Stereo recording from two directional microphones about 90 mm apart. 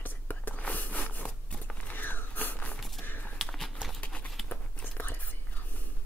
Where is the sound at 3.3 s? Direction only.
5° left (ahead or behind).